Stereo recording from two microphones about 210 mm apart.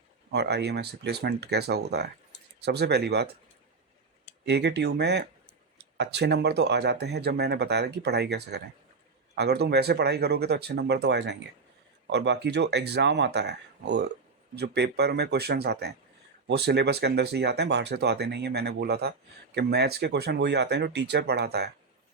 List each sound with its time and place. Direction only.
0.3 s speech: 50° right (ahead or behind)
4.4 s speech: 55° right (ahead or behind)